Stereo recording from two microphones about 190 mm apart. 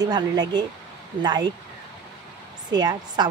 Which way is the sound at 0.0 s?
20° right (ahead or behind).